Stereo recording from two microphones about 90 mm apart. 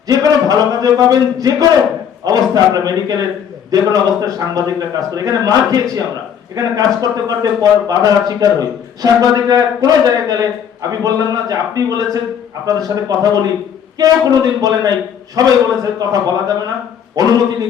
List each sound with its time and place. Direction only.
0.1 s a man's voice: 40° right (ahead or behind)